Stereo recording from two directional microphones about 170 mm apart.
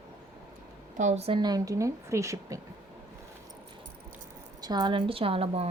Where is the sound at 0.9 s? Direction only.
45° right (ahead or behind).